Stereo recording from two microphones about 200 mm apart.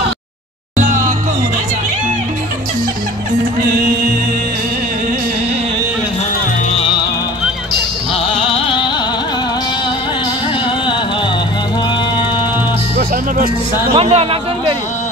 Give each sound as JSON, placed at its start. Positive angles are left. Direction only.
{"t": 0.7, "sound": "music", "side_deg": -40}
{"t": 8.5, "sound": "music", "side_deg": 25}
{"t": 12.9, "sound": "music", "side_deg": -45}
{"t": 13.9, "sound": "speech", "side_deg": -30}